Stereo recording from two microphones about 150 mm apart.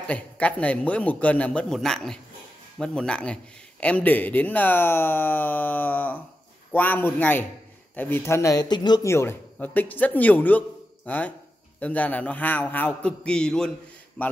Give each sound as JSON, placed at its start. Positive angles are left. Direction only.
{"t": 0.0, "sound": "speech", "side_deg": 10}
{"t": 9.1, "sound": "speech", "side_deg": 15}